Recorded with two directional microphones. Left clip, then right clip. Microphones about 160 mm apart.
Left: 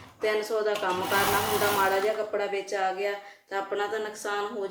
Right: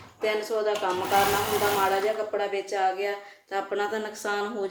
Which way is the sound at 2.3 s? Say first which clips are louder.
Right 1 dB; 30° right (ahead or behind).